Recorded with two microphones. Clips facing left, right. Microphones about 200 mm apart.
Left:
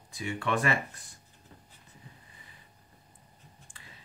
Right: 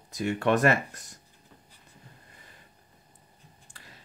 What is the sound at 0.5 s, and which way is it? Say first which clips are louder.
Speech: right 4 dB; 40° right (ahead or behind).